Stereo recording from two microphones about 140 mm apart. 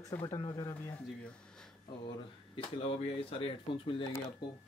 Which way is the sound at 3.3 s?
40° left (ahead or behind).